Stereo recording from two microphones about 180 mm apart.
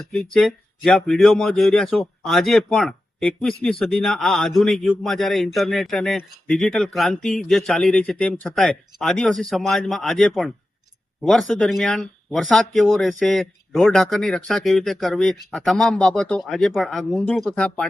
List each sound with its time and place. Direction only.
0.2 s speech: centre (ahead or behind)